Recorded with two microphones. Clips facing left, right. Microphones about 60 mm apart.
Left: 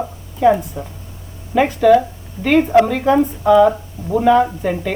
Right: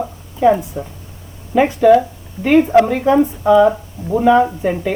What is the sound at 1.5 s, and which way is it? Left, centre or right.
Speech, centre.